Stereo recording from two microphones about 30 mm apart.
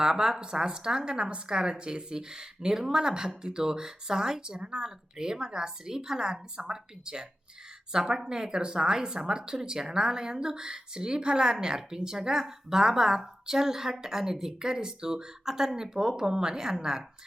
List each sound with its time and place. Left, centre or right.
0.0 s speech: right